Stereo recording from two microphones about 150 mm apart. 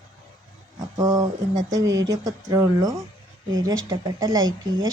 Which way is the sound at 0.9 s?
25° right (ahead or behind).